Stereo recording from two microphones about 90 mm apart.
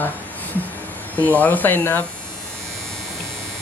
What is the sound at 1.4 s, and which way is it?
Speech, 20° left (ahead or behind).